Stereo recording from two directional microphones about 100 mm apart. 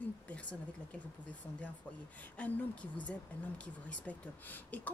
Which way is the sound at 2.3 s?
15° left (ahead or behind).